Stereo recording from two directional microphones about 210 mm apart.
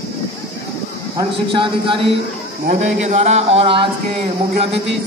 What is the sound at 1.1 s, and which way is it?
Speech, 20° right (ahead or behind).